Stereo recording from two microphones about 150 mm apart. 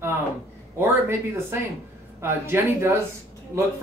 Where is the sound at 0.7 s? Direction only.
15° right (ahead or behind).